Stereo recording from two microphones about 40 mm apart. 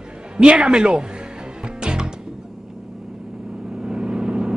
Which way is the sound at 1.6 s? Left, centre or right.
Right.